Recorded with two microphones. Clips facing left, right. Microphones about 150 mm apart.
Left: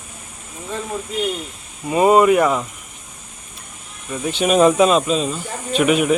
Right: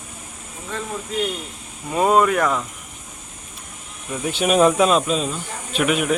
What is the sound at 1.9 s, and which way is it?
Speech, 5° left (ahead or behind).